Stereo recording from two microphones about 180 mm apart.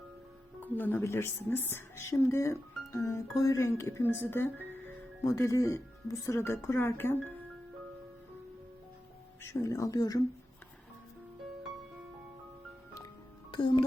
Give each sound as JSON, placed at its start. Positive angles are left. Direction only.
{"t": 0.6, "sound": "a woman's voice", "side_deg": 10}
{"t": 9.4, "sound": "a woman's voice", "side_deg": 15}
{"t": 13.5, "sound": "a child's voice", "side_deg": 25}